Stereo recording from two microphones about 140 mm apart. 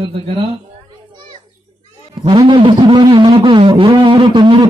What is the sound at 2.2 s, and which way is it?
Speech, 35° right (ahead or behind).